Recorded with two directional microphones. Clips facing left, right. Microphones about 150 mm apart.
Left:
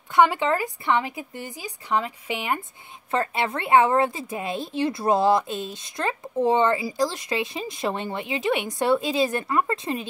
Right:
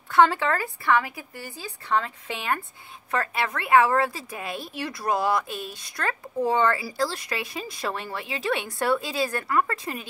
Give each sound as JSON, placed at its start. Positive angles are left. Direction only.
{"t": 0.1, "sound": "a woman's voice", "side_deg": 15}